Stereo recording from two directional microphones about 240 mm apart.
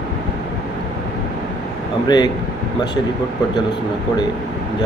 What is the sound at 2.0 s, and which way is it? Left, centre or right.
Speech, centre.